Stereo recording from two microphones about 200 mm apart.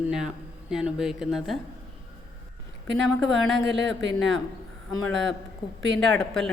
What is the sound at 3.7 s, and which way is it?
Speech, 65° right (ahead or behind).